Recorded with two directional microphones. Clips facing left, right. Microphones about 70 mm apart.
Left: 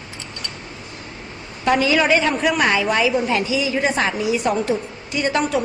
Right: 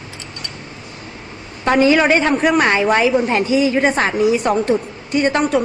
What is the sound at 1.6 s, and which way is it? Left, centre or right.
A woman's voice, right.